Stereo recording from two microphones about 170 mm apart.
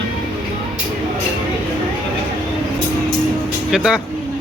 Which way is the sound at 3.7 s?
5° right (ahead or behind).